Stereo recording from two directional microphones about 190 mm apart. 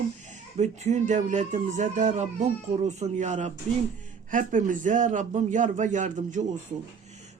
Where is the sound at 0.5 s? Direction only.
35° right (ahead or behind).